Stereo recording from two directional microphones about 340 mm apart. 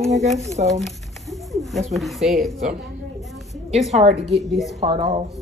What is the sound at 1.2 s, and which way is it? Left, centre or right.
Speech, centre.